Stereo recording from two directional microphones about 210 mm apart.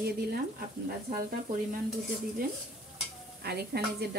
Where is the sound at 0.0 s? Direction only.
45° right (ahead or behind).